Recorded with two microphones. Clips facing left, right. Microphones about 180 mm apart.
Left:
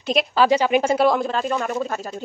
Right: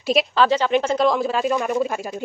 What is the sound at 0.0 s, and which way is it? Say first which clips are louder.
Speech: right 2 dB; centre (ahead or behind).